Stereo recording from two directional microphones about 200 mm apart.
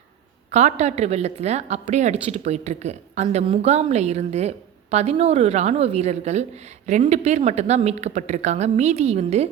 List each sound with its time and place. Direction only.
0.5 s a woman's voice: 35° right (ahead or behind)